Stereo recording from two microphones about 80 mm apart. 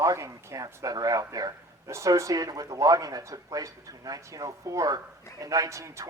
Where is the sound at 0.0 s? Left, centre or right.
Right.